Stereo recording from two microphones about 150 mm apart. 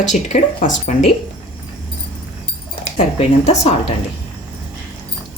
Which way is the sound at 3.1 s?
50° left (ahead or behind).